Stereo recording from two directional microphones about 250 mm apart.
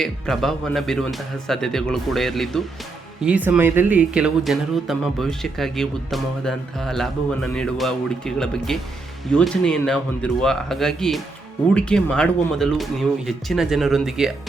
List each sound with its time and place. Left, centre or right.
0.0 s speech: centre